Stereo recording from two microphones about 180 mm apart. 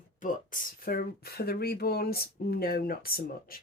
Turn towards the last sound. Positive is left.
turn(degrees=55)  # may be behind; listen again after turning